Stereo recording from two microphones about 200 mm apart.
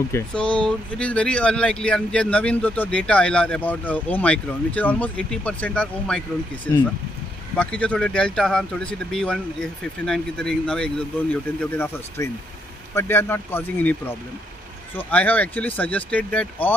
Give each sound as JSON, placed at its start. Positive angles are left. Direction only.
{"t": 0.1, "sound": "speech", "side_deg": 5}